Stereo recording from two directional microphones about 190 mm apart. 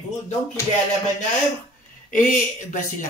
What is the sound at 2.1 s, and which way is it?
Speech, 45° left (ahead or behind).